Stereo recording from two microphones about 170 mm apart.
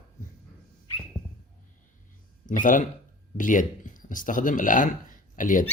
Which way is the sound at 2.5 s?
50° left (ahead or behind).